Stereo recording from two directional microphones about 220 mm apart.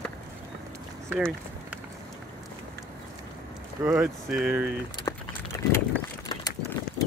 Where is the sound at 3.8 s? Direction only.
5° right (ahead or behind).